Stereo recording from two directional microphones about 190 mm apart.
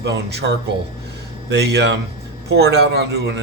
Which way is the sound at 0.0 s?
65° right (ahead or behind).